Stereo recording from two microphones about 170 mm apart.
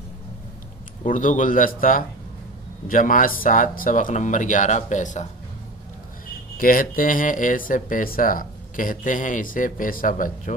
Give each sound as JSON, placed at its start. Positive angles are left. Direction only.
{"t": 1.0, "sound": "speech", "side_deg": 50}
{"t": 6.6, "sound": "speech", "side_deg": 55}